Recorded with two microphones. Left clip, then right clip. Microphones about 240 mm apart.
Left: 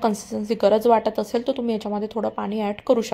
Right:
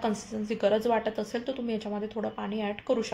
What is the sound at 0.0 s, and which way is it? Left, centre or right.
A woman's voice, left.